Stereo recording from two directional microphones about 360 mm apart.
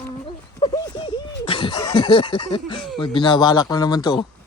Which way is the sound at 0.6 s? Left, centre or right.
Centre.